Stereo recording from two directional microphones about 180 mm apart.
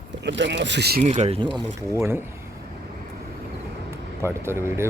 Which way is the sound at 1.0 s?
40° right (ahead or behind).